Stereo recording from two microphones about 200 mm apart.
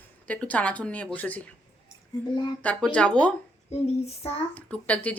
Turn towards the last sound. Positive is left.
turn(degrees=5)  # may be behind; listen again after turning